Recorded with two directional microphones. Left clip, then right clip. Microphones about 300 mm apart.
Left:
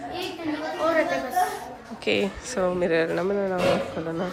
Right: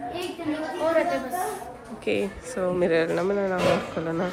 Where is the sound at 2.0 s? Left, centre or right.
Centre.